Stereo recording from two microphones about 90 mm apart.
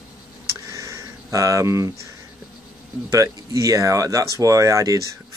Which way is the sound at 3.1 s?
35° right (ahead or behind).